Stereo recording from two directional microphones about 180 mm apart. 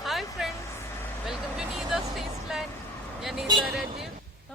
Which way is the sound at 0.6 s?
15° left (ahead or behind).